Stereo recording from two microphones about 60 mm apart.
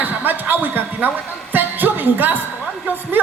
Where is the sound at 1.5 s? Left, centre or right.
Right.